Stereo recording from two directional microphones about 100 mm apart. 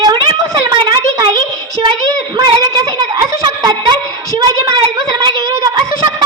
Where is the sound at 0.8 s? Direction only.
50° right (ahead or behind).